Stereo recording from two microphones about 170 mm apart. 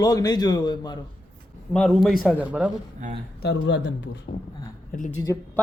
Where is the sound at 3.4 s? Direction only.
85° left.